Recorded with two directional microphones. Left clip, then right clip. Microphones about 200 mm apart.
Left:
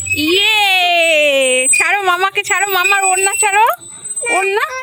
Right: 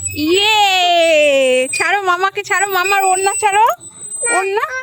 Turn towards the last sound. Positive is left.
turn(degrees=0)  # may be behind; listen again after turning